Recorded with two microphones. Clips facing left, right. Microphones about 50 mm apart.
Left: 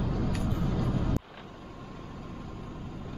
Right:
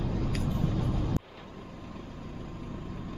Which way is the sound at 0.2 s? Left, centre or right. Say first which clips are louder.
Even; left.